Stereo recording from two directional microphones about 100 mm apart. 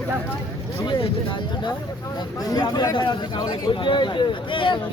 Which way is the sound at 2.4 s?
45° left (ahead or behind).